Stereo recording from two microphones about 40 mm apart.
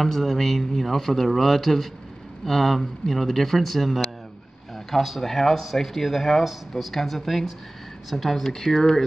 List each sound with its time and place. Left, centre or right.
0.0 s speech: centre